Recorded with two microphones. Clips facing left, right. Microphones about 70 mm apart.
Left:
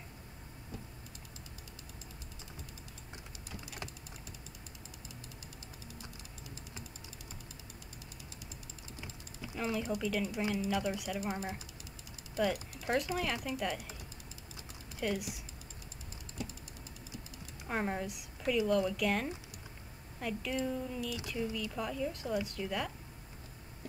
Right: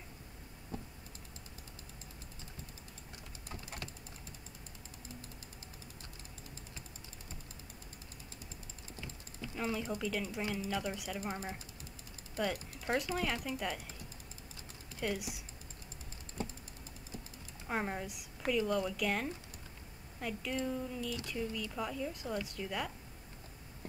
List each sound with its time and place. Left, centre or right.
9.0 s typing: centre
9.6 s speech: centre
12.4 s speech: centre
15.0 s speech: centre
16.4 s a sound: right
17.4 s typing: centre
18.5 s speech: centre